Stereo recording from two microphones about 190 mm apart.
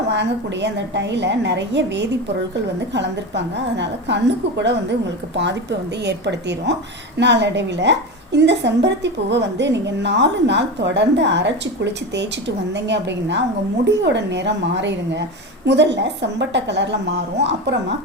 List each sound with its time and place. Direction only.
0.1 s a woman's voice: 65° right (ahead or behind)
6.1 s a woman's voice: 65° right (ahead or behind)